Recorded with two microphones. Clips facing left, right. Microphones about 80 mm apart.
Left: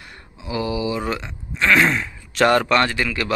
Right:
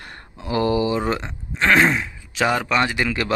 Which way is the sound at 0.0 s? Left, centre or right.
Right.